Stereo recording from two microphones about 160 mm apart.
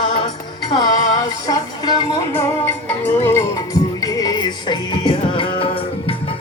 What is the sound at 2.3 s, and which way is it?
Music, 15° left (ahead or behind).